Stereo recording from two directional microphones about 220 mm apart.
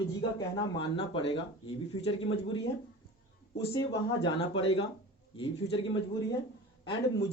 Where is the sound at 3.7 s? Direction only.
20° left (ahead or behind).